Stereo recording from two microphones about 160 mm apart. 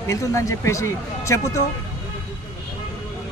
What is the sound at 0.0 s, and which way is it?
Speech, 20° left (ahead or behind).